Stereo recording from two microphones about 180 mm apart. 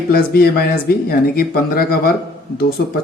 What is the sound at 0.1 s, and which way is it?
Speech, 55° left (ahead or behind).